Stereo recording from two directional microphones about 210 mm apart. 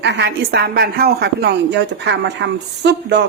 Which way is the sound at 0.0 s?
55° right (ahead or behind).